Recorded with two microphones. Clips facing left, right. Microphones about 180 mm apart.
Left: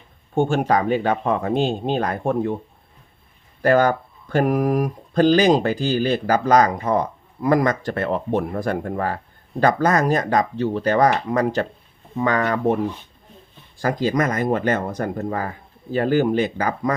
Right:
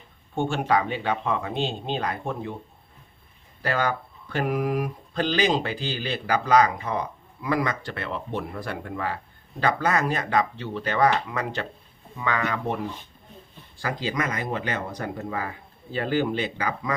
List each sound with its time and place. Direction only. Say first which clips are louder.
0.3 s speech: left 5 dB; 45° left (ahead or behind)
3.6 s speech: left 9 dB; 45° left (ahead or behind)